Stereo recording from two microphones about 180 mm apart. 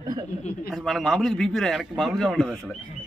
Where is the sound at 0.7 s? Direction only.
Centre (ahead or behind).